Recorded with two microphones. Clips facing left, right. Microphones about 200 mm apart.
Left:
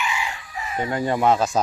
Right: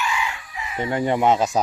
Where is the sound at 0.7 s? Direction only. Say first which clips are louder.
Right 1 dB; 20° right (ahead or behind).